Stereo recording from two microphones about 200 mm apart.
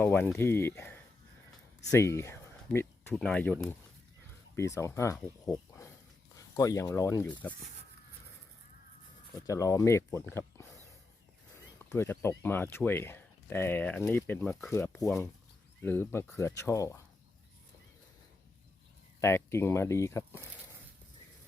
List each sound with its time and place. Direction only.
0.0 s speech: 10° left (ahead or behind)
5.5 s a sound: 15° left (ahead or behind)
6.3 s speech: 15° left (ahead or behind)
9.5 s speech: 15° left (ahead or behind)
11.9 s speech: 10° left (ahead or behind)
19.2 s speech: 15° left (ahead or behind)